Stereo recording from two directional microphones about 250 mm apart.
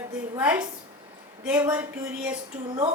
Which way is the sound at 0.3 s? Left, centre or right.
Centre.